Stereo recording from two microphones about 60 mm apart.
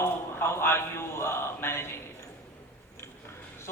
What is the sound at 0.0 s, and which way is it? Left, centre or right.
A man's voice, left.